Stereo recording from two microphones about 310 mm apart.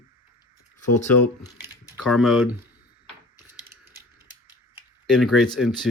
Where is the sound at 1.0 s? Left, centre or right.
Centre.